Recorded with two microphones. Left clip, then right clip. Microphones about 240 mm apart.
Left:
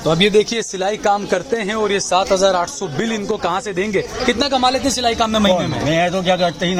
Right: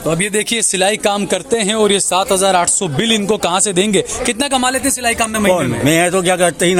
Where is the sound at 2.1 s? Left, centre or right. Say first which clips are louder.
Left 4 dB; right.